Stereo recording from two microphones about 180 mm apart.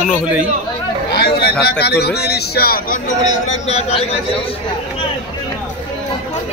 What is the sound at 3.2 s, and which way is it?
Speech, 35° left (ahead or behind).